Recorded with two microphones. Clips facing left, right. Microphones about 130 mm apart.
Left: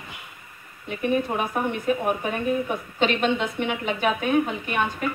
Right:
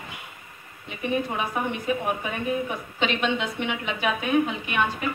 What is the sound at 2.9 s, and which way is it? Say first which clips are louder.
A woman's voice: left 3 dB; 45° left (ahead or behind).